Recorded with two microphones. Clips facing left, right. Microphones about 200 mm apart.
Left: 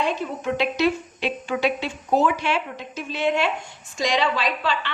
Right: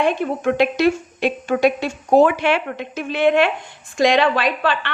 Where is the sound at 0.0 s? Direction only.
55° right (ahead or behind).